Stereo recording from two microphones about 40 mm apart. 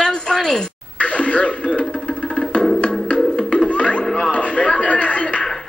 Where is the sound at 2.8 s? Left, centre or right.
Left.